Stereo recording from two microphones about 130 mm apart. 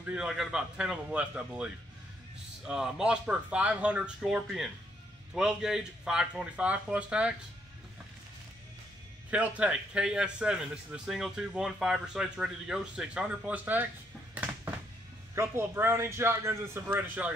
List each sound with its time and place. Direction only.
0.0 s a man's voice: 5° right (ahead or behind)
9.3 s a man's voice: 10° right (ahead or behind)
14.3 s a sound: 15° right (ahead or behind)
15.3 s speech: 20° right (ahead or behind)